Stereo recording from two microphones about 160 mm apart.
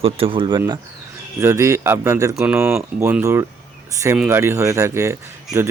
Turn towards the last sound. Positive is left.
turn(degrees=-20)  # may be behind; listen again after turning